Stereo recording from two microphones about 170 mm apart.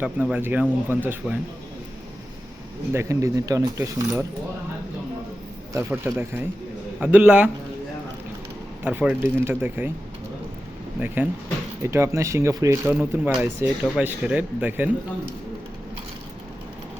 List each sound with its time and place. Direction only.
0.0 s speech: 10° right (ahead or behind)
2.9 s speech: 15° right (ahead or behind)
5.7 s speech: 15° right (ahead or behind)
8.8 s speech: 10° right (ahead or behind)
11.0 s speech: 10° right (ahead or behind)